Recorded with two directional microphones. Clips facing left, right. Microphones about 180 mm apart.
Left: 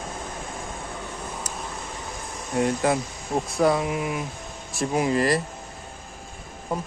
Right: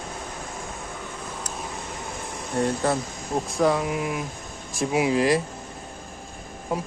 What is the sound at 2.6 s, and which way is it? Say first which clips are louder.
Speech: left 1 dB; 5° left (ahead or behind).